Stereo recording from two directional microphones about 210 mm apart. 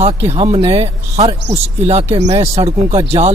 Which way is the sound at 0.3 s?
30° right (ahead or behind).